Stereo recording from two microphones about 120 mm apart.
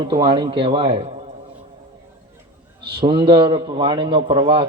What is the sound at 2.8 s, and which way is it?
A man's voice, 45° right (ahead or behind).